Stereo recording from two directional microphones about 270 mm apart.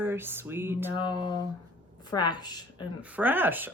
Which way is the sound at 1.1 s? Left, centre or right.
Centre.